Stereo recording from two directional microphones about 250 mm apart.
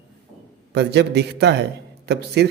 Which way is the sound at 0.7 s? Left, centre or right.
Right.